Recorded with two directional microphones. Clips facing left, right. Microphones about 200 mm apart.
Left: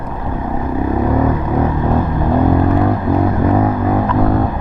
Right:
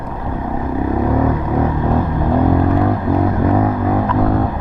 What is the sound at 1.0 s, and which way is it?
Vehicle, 25° left (ahead or behind).